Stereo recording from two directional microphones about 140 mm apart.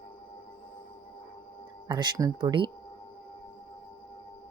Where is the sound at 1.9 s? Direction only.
30° right (ahead or behind).